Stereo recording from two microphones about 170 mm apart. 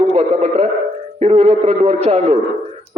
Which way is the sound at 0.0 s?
35° right (ahead or behind).